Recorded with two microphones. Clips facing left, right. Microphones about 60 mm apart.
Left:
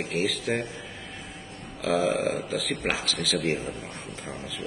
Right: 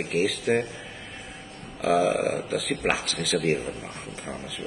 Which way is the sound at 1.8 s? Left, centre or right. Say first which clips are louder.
Right 3 dB; centre.